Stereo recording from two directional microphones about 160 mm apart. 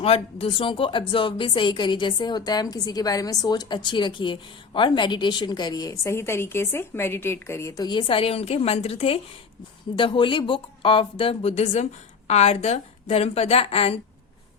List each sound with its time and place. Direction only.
0.0 s speech: 40° left (ahead or behind)